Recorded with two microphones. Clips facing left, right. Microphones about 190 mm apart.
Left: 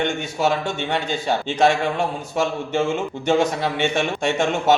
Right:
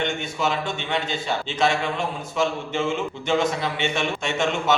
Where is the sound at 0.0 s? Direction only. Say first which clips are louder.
Left 4 dB; 50° left (ahead or behind).